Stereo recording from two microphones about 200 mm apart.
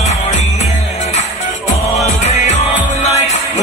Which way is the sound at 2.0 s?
35° left (ahead or behind).